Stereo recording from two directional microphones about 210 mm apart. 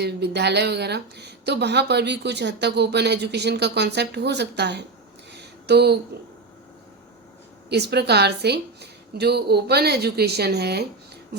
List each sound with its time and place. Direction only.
0.0 s speech: 50° right (ahead or behind)
5.3 s a sound: 55° right (ahead or behind)
7.7 s speech: 50° right (ahead or behind)